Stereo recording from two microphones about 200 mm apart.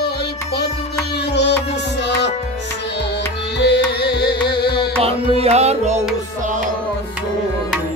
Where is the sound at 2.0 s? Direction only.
60° left (ahead or behind).